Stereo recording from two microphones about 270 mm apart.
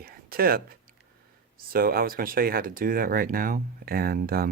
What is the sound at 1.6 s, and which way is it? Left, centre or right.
Speech, right.